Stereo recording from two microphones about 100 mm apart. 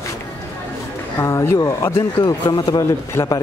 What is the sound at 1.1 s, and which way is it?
Speech, 30° left (ahead or behind).